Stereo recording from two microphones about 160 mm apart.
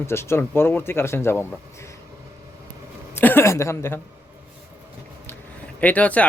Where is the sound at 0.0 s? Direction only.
15° left (ahead or behind).